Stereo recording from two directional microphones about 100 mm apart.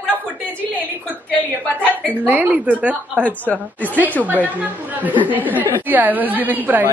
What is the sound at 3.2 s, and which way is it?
Speech, 15° left (ahead or behind).